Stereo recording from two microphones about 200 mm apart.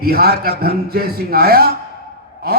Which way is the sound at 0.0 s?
50° right (ahead or behind).